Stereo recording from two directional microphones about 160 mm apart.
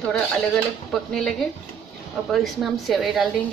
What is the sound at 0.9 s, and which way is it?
A woman's voice, 5° left (ahead or behind).